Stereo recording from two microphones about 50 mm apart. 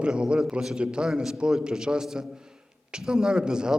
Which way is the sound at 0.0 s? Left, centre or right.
Centre.